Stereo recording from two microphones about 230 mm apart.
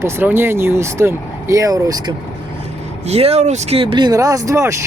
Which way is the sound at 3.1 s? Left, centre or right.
Right.